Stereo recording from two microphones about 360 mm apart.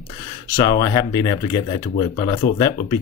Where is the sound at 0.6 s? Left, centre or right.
Centre.